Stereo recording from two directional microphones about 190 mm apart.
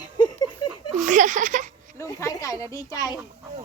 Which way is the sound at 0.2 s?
20° left (ahead or behind).